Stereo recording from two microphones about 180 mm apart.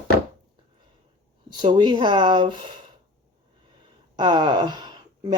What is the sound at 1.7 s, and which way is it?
Speech, 25° right (ahead or behind).